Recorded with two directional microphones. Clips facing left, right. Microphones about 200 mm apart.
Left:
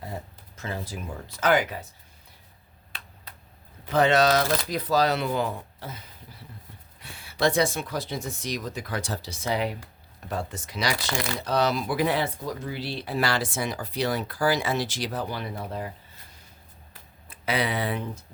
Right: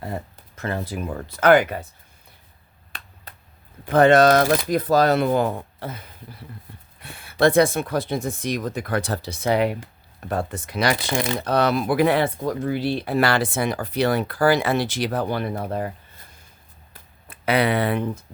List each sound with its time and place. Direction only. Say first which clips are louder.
0.0 s speech: right 6 dB; 60° right (ahead or behind)
3.3 s a sound: right 4 dB; 50° right (ahead or behind)
3.8 s speech: right 6 dB; 50° right (ahead or behind)
17.2 s speech: right 7 dB; 60° right (ahead or behind)